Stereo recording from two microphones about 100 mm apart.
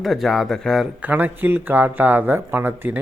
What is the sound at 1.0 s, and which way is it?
Speech, 20° right (ahead or behind).